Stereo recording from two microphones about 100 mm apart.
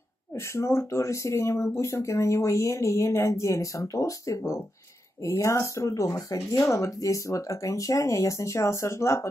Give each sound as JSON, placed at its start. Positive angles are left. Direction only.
{"t": 0.3, "sound": "speech", "side_deg": 30}